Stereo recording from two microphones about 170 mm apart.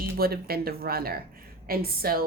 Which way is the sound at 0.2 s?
65° right (ahead or behind).